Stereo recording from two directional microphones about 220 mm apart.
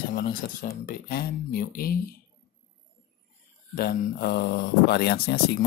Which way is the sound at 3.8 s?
45° left (ahead or behind).